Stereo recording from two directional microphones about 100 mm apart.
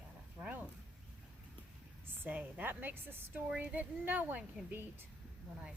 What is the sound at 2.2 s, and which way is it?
A woman's voice, 15° right (ahead or behind).